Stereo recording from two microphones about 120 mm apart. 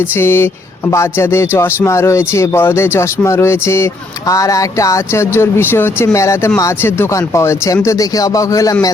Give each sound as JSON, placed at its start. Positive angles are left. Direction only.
{"t": 0.2, "sound": "speech", "side_deg": 20}